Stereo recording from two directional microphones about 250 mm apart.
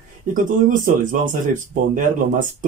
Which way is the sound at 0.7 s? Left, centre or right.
Right.